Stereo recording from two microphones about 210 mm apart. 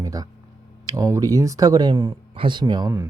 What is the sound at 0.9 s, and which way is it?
Speech, 15° right (ahead or behind).